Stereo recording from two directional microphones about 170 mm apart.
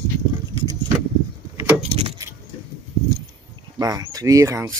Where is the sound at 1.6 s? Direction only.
10° right (ahead or behind).